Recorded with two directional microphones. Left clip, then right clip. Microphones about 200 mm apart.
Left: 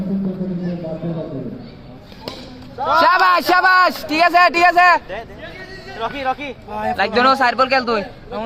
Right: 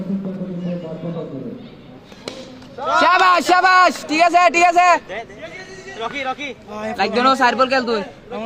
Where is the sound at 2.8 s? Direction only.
45° right (ahead or behind).